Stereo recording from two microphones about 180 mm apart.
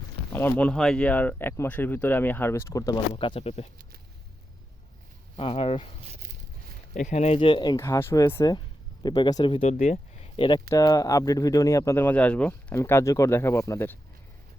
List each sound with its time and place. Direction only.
0.3 s speech: 10° left (ahead or behind); by 3.7 s 35° left (ahead or behind)
5.4 s speech: 30° left (ahead or behind)
6.1 s a sound: 40° right (ahead or behind)
6.9 s speech: 40° left (ahead or behind)
9.7 s speech: 50° left (ahead or behind)
10.3 s speech: 25° left (ahead or behind)